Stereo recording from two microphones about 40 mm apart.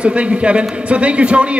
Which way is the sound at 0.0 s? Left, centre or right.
Right.